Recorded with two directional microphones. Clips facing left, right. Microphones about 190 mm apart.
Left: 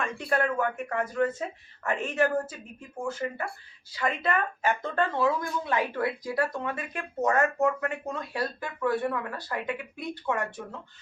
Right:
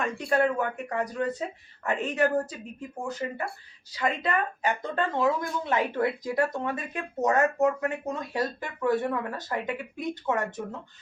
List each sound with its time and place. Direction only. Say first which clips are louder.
0.0 s speech: right 3 dB; 20° right (ahead or behind)